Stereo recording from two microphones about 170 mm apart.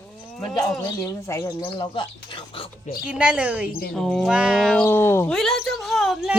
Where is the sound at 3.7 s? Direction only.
60° left (ahead or behind).